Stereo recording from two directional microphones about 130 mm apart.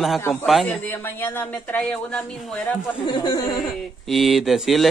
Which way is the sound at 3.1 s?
35° left (ahead or behind).